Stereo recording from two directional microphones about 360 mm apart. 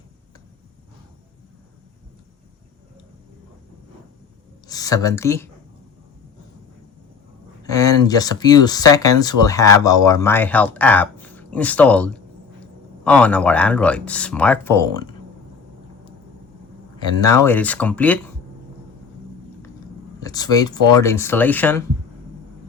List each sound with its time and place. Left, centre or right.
4.7 s speech: centre
7.6 s speech: centre
17.0 s speech: centre
20.1 s speech: centre